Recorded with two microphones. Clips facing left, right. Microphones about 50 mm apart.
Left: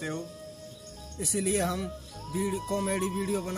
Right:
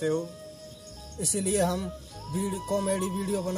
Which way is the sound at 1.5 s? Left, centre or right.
Left.